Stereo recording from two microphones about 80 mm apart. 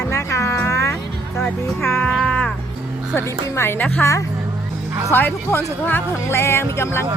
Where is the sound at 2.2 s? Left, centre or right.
Centre.